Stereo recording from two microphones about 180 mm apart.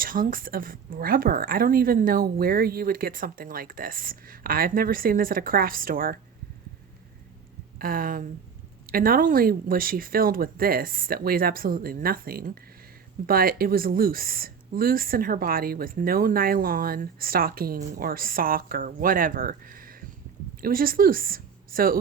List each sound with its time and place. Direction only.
0.0 s speech: 50° right (ahead or behind)
7.8 s a woman's voice: 50° right (ahead or behind)